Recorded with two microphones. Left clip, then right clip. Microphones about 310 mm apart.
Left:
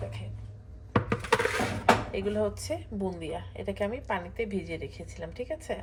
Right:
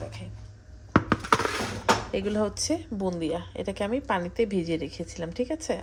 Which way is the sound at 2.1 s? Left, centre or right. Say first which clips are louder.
Right 2 dB; right.